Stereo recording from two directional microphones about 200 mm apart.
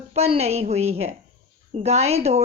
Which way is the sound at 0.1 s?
30° right (ahead or behind).